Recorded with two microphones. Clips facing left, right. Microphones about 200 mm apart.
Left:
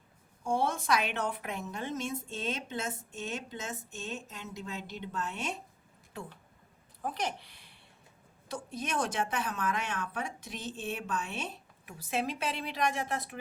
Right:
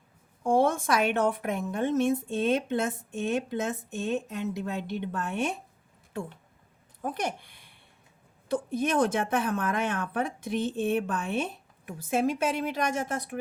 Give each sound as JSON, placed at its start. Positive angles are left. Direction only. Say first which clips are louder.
{"t": 0.4, "sound": "a woman's voice", "louder": "right 7 dB", "side_deg": -55}
{"t": 7.0, "sound": "a woman's voice", "louder": "right 4 dB", "side_deg": -50}